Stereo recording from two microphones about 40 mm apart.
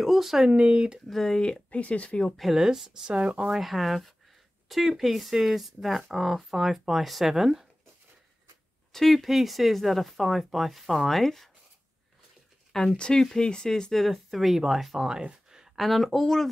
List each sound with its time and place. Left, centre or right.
0.0 s speech: centre
0.5 s speech: right
1.0 s speech: centre
1.7 s speech: left
2.0 s speech: left
2.3 s speech: centre
2.6 s speech: centre
3.2 s speech: right
3.4 s speech: centre
8.9 s speech: centre
12.9 s speech: centre
13.9 s speech: centre
15.1 s a sound: right
15.6 s speech: centre